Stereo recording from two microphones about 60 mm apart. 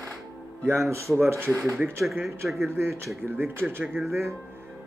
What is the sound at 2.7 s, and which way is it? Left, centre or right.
Speech, right.